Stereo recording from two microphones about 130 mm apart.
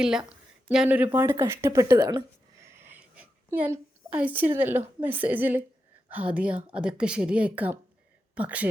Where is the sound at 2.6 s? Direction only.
20° right (ahead or behind).